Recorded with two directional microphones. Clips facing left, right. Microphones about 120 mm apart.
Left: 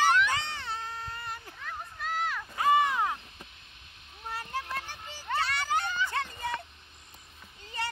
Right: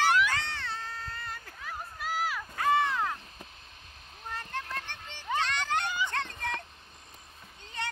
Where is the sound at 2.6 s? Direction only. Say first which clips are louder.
Left 2 dB; 15° left (ahead or behind).